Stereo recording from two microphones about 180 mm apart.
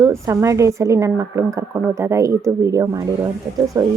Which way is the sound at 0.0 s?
15° right (ahead or behind).